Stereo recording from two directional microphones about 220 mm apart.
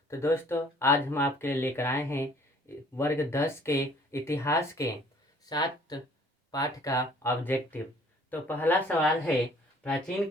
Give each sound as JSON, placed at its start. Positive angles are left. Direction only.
{"t": 0.1, "sound": "speech", "side_deg": 10}